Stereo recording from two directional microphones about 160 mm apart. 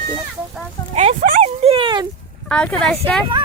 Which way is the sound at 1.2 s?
60° right (ahead or behind).